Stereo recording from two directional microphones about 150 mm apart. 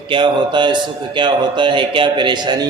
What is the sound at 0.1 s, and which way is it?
A man's voice, 30° right (ahead or behind).